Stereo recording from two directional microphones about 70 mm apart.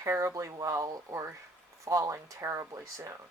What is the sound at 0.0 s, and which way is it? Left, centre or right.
Speech, right.